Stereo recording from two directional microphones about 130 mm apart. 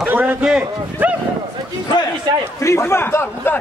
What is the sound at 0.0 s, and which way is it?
A man's voice, 15° right (ahead or behind).